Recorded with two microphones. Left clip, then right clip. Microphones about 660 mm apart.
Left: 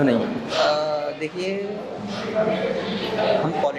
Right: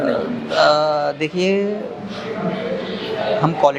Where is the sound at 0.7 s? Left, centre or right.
Right.